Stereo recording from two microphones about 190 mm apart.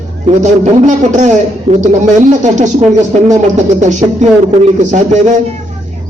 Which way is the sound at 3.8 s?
40° right (ahead or behind).